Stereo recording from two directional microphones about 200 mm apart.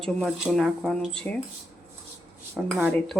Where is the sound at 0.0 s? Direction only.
Centre (ahead or behind).